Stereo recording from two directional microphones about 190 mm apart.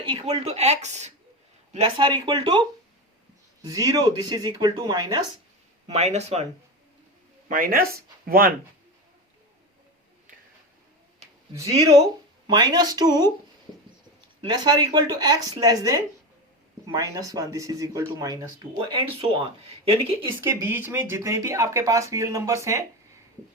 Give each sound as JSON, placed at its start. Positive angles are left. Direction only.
{"t": 0.1, "sound": "speech", "side_deg": -30}
{"t": 5.9, "sound": "speech", "side_deg": -35}
{"t": 7.4, "sound": "speech", "side_deg": -45}
{"t": 11.2, "sound": "a sound", "side_deg": -35}
{"t": 11.5, "sound": "speech", "side_deg": -15}
{"t": 14.4, "sound": "speech", "side_deg": -20}
{"t": 20.4, "sound": "speech", "side_deg": -10}